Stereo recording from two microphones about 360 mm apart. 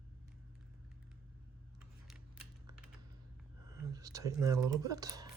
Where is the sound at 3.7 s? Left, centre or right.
Centre.